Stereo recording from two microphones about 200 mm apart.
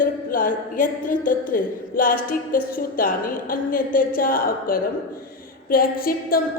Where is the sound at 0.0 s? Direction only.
45° left (ahead or behind).